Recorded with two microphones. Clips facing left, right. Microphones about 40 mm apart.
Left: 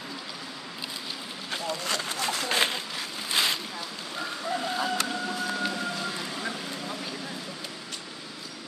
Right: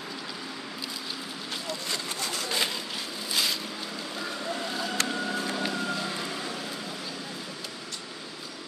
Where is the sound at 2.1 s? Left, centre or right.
Left.